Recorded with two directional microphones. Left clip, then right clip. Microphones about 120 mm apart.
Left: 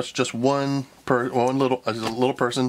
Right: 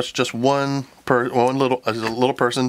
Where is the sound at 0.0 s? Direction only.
25° right (ahead or behind).